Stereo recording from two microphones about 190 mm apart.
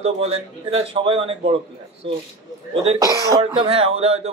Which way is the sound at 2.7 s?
30° right (ahead or behind).